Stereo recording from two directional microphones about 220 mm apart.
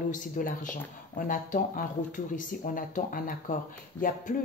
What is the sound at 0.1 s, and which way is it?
Speech, 40° left (ahead or behind).